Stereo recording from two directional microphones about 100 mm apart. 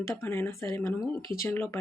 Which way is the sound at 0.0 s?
30° left (ahead or behind).